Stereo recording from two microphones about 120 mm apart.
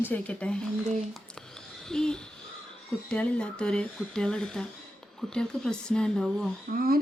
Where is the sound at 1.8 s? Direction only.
5° left (ahead or behind).